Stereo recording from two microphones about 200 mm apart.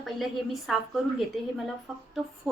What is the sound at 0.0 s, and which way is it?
Speech, centre (ahead or behind).